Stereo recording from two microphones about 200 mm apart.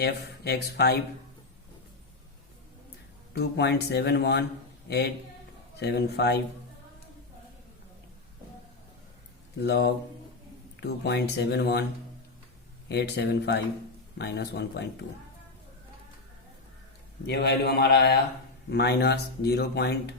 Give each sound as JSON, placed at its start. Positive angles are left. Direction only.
{"t": 0.0, "sound": "speech", "side_deg": 55}
{"t": 3.3, "sound": "speech", "side_deg": 55}
{"t": 9.6, "sound": "speech", "side_deg": 55}
{"t": 12.9, "sound": "speech", "side_deg": 55}
{"t": 17.2, "sound": "speech", "side_deg": 55}